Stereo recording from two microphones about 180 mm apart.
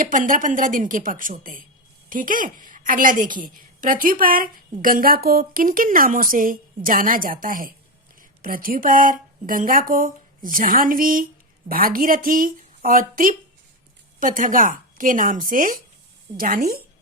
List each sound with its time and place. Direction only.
0.0 s a woman's voice: 45° right (ahead or behind)